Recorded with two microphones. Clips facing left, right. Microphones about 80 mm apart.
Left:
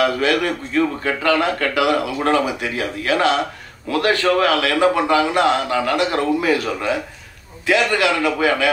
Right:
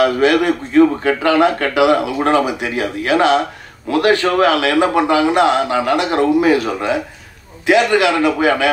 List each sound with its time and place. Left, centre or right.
0.0 s a man's voice: right